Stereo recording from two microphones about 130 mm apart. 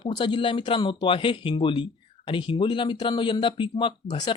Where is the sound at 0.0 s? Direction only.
40° left (ahead or behind).